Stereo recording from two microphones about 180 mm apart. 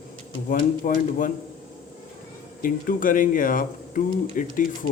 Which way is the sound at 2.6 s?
50° left (ahead or behind).